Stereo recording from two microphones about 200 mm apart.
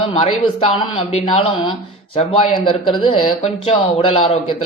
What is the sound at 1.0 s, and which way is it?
A man's voice, 25° left (ahead or behind).